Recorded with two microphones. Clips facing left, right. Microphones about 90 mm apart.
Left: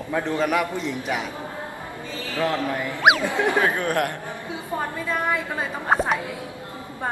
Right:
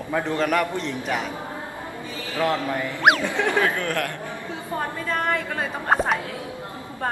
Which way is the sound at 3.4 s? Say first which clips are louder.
Left 1 dB; 20° left (ahead or behind).